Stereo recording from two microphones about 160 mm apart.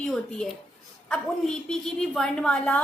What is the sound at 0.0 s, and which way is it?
A woman's voice, 5° left (ahead or behind).